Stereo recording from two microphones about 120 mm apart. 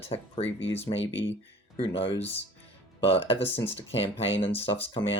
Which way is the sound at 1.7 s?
50° left (ahead or behind).